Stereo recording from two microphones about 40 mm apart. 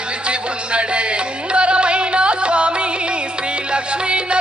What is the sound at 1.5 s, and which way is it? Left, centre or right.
Music, right.